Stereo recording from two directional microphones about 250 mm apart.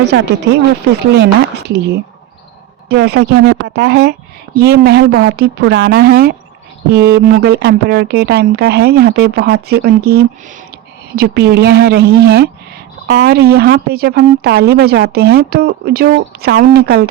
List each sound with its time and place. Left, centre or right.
0.0 s speech: right